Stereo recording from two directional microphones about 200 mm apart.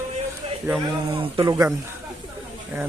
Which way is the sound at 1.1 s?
25° right (ahead or behind).